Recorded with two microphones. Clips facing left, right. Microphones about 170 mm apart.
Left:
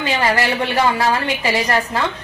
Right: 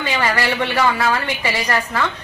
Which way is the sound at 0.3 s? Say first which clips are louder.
Left 1 dB; 30° left (ahead or behind).